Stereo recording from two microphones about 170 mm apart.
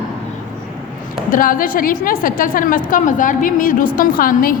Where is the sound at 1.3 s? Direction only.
55° left (ahead or behind).